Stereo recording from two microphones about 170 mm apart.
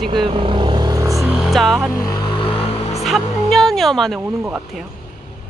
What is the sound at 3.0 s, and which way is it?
Speech, centre (ahead or behind).